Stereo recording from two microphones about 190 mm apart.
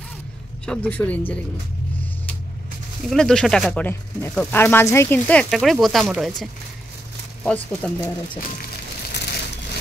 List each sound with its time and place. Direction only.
0.7 s speech: 10° left (ahead or behind)
3.1 s speech: 5° left (ahead or behind)
9.1 s crushing: 60° left (ahead or behind)